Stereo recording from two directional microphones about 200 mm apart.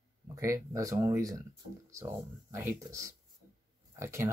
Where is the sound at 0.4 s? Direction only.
15° right (ahead or behind).